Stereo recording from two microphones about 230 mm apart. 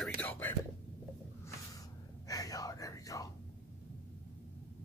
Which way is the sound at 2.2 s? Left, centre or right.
Centre.